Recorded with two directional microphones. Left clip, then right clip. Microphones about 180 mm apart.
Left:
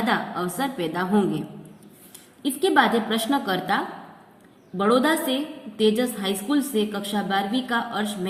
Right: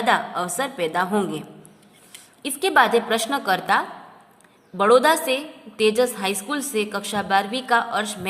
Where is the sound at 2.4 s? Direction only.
45° right (ahead or behind).